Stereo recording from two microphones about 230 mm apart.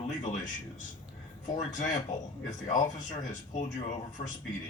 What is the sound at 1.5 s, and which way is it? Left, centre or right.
A man's voice, left.